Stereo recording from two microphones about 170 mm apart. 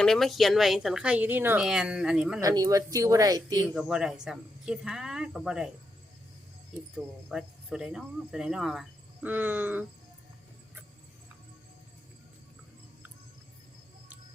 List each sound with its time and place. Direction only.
0.0 s speech: centre (ahead or behind)
2.4 s speech: 20° right (ahead or behind)
3.8 s speech: 5° right (ahead or behind)
6.9 s speech: 5° right (ahead or behind)